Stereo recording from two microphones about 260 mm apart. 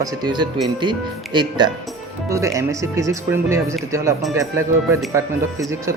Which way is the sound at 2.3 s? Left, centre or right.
Centre.